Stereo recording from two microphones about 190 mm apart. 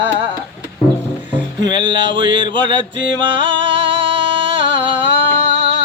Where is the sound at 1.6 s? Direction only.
25° right (ahead or behind).